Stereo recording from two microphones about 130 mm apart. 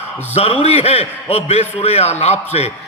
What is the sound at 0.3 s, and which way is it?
A man's voice, 50° left (ahead or behind).